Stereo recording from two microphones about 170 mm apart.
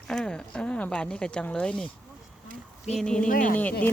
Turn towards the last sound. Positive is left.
turn(degrees=10)  # may be behind; listen again after turning